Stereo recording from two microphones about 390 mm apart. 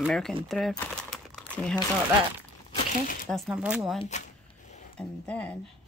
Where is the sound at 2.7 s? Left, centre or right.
Left.